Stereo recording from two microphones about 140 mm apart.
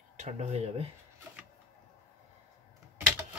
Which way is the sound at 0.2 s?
55° right (ahead or behind).